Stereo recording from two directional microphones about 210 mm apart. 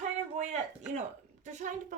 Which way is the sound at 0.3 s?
35° right (ahead or behind).